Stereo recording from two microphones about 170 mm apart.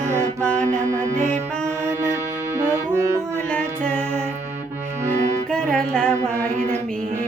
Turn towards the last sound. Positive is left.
turn(degrees=5)  # may be behind; listen again after turning